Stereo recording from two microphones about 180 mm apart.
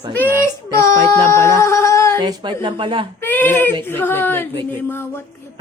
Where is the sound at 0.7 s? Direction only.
15° left (ahead or behind).